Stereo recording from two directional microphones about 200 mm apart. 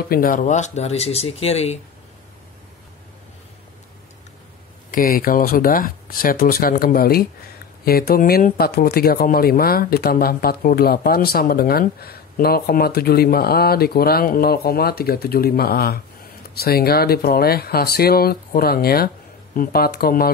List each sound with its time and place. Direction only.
0.1 s speech: 45° left (ahead or behind)
4.9 s speech: 45° left (ahead or behind)